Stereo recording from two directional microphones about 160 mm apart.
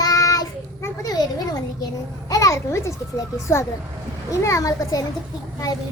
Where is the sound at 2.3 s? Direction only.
20° left (ahead or behind).